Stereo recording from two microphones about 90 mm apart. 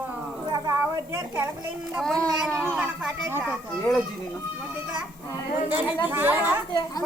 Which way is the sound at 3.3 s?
25° right (ahead or behind).